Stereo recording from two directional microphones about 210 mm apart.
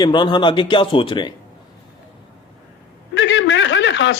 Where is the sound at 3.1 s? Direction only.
60° left (ahead or behind).